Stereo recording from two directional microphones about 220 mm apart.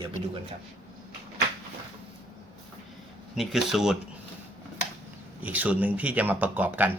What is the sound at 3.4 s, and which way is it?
Speech, centre (ahead or behind).